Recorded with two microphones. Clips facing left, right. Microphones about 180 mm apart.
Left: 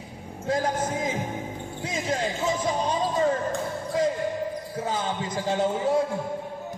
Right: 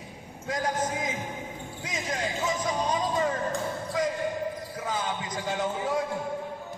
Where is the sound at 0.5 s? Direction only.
30° left (ahead or behind).